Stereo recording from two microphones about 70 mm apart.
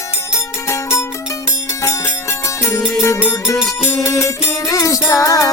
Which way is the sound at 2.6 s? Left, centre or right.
Left.